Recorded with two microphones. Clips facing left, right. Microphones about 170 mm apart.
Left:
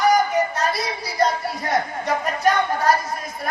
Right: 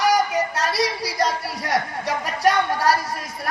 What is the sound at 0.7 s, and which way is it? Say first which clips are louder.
Music: right 4 dB; 80° right.